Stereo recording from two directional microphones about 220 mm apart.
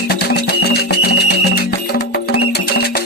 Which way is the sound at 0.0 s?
45° left (ahead or behind).